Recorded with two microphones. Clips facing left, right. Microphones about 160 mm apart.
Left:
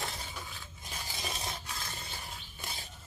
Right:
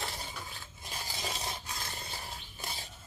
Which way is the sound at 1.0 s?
15° right (ahead or behind).